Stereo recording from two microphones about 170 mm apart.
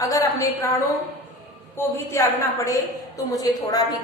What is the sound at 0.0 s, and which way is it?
Speech, 20° left (ahead or behind).